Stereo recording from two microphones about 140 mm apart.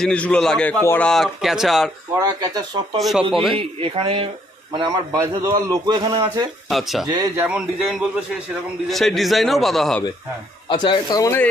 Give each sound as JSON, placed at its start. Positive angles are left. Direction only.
{"t": 0.0, "sound": "a man's voice", "side_deg": 5}
{"t": 1.0, "sound": "a man's voice", "side_deg": 0}
{"t": 2.1, "sound": "a man's voice", "side_deg": -20}
{"t": 3.0, "sound": "a man's voice", "side_deg": 0}
{"t": 3.5, "sound": "a man's voice", "side_deg": -40}
{"t": 6.7, "sound": "a man's voice", "side_deg": 0}
{"t": 10.7, "sound": "speech", "side_deg": 35}